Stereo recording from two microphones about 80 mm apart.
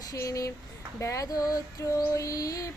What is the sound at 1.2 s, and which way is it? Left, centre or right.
Mantra, left.